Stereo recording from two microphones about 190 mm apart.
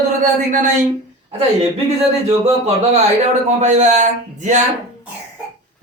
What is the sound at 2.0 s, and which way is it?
Speech, 35° right (ahead or behind).